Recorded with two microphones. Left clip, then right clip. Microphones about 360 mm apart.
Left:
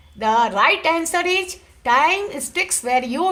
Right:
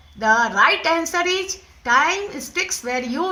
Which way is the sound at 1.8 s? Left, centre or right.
Centre.